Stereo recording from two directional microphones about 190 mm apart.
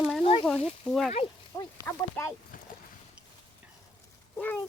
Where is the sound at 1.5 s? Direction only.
15° left (ahead or behind).